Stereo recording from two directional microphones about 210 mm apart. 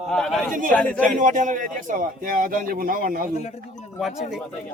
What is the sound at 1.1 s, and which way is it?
A man's voice, 35° right (ahead or behind).